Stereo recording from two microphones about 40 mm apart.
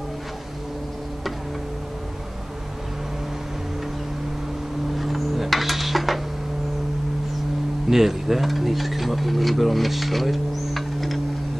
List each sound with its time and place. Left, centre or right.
4.9 s dishes: centre
7.9 s speech: centre